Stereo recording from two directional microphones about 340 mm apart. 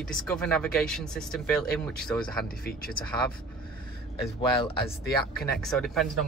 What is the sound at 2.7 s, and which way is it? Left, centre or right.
Speech, left.